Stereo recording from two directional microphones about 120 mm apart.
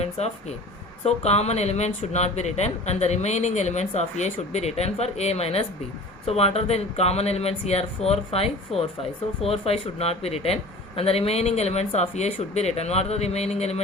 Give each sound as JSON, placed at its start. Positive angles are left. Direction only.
{"t": 0.0, "sound": "a man's voice", "side_deg": 65}